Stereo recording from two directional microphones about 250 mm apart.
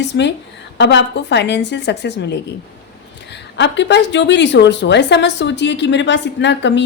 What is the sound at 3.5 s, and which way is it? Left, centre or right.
A woman's voice, left.